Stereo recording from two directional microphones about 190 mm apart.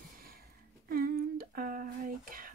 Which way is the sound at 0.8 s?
50° right (ahead or behind).